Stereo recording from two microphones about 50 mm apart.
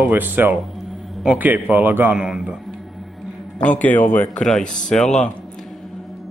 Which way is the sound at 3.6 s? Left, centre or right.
Left.